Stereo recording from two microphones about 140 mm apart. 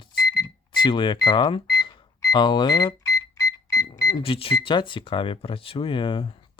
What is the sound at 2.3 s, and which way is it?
Alarm clock, 30° left (ahead or behind).